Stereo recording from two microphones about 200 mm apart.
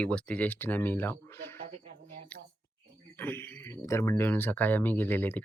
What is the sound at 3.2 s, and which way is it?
Speech, 10° left (ahead or behind).